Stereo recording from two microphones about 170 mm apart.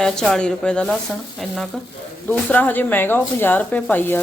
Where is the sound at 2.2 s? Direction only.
10° left (ahead or behind).